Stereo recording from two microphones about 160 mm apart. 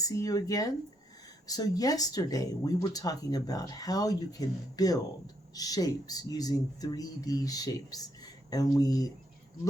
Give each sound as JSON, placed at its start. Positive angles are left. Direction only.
{"t": 0.0, "sound": "speech", "side_deg": 20}